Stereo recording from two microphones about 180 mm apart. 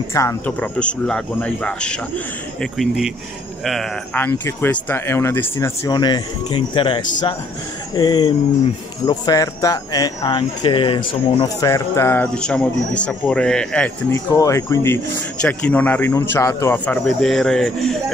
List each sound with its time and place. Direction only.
0.1 s speech: 15° left (ahead or behind)
0.5 s speech: 5° left (ahead or behind)
4.2 s speech: 10° left (ahead or behind)
14.1 s speech: 20° left (ahead or behind); by 17.9 s 5° left (ahead or behind)